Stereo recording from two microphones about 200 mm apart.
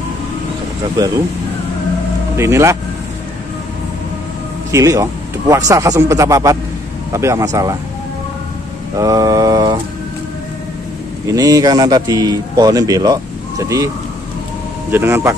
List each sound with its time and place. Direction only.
2.3 s speech: 15° right (ahead or behind)
4.6 s speech: 15° right (ahead or behind)
8.9 s a man's voice: 15° right (ahead or behind)
11.3 s a man's voice: 20° right (ahead or behind)
14.9 s speech: 10° right (ahead or behind)